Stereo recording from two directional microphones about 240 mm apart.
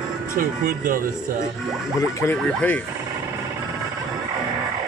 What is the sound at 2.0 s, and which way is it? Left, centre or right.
Speech, centre.